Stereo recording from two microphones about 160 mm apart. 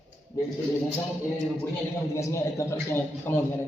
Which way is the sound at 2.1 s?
20° left (ahead or behind).